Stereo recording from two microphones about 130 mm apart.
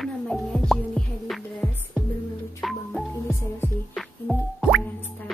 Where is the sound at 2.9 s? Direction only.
15° left (ahead or behind).